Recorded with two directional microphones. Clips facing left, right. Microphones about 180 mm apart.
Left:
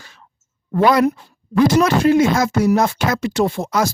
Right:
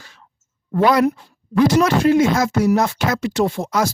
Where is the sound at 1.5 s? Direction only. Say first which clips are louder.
Left 1 dB; 45° left (ahead or behind).